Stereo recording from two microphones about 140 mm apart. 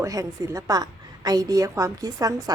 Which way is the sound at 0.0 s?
25° right (ahead or behind).